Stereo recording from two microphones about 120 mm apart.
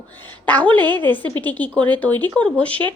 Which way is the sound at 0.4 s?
15° left (ahead or behind).